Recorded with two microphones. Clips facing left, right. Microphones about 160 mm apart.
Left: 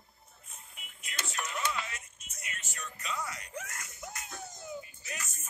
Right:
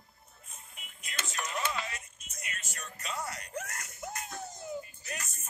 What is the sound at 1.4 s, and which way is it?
Music, 35° right (ahead or behind).